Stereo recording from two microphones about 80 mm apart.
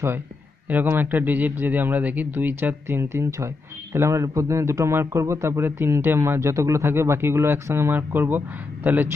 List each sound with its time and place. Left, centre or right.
0.7 s a man's voice: right